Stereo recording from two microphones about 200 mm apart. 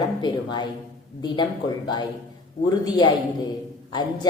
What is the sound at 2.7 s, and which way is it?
Speech, 20° left (ahead or behind).